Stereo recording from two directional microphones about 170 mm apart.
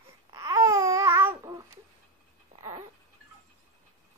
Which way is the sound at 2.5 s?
25° right (ahead or behind).